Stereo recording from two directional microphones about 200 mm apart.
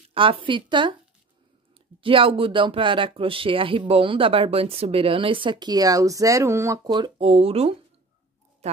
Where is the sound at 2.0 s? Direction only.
25° right (ahead or behind).